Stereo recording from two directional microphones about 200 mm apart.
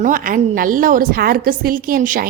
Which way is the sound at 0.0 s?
40° right (ahead or behind).